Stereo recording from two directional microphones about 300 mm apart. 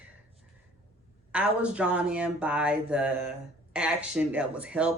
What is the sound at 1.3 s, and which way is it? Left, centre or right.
Speech, centre.